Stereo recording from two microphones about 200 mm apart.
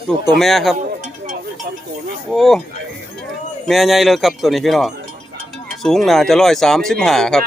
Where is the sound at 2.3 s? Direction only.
Centre (ahead or behind).